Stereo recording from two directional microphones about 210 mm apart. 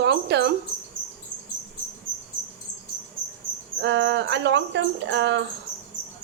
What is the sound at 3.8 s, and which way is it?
A woman's voice, 60° right (ahead or behind).